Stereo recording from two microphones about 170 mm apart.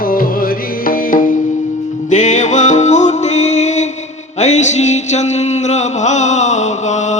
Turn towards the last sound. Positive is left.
turn(degrees=45)  # may be behind; listen again after turning